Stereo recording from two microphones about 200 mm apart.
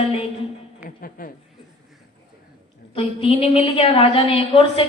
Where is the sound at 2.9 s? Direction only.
25° left (ahead or behind).